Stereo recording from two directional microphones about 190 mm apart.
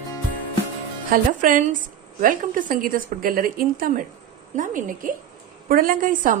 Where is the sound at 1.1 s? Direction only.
45° right (ahead or behind).